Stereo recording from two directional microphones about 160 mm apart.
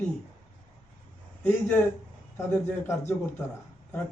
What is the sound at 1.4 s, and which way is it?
A man's voice, 10° left (ahead or behind).